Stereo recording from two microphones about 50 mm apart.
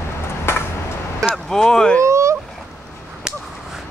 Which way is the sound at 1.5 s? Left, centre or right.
Centre.